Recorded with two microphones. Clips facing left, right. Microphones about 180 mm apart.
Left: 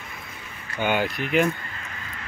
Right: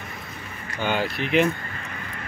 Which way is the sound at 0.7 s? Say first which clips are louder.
Left 1 dB; 10° left (ahead or behind).